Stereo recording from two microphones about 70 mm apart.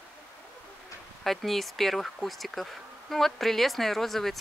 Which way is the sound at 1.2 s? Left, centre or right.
Centre.